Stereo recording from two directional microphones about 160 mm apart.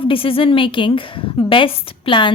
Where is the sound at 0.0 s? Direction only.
35° left (ahead or behind).